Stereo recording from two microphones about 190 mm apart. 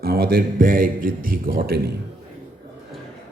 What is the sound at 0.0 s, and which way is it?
A man's voice, 50° right (ahead or behind).